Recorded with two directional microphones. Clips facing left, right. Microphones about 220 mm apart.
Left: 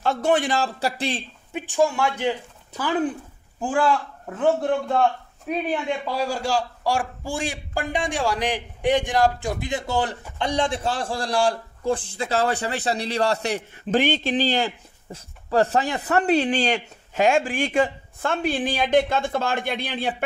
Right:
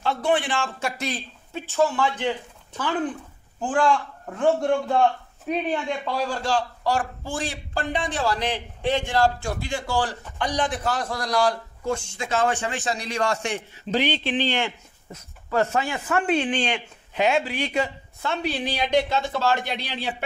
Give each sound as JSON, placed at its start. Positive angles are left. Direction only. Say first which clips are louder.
{"t": 0.0, "sound": "a man's voice", "louder": "left 2 dB", "side_deg": 45}
{"t": 1.5, "sound": "a man's voice", "louder": "left 1 dB", "side_deg": 15}
{"t": 13.8, "sound": "speech", "louder": "left 3 dB", "side_deg": 50}